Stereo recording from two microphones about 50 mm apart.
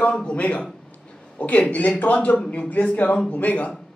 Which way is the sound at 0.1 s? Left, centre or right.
Centre.